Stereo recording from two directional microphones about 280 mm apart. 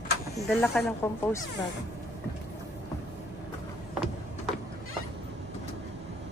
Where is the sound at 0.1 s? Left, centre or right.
Left.